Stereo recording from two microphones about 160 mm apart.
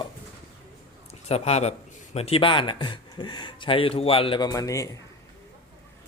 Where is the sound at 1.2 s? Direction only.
40° left (ahead or behind); by 5.0 s 20° left (ahead or behind).